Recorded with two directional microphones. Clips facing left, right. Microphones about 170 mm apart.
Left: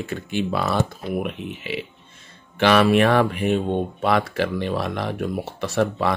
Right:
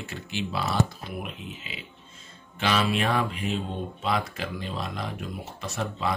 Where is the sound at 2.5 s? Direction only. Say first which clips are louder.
Left 9 dB; 75° left (ahead or behind).